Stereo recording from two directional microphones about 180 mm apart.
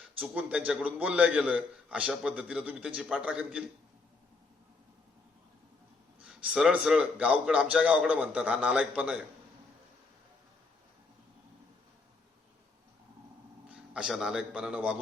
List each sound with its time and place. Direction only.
0.2 s a man's voice: 10° right (ahead or behind)
6.2 s a man's voice: 5° right (ahead or behind)
13.7 s a man's voice: 5° right (ahead or behind)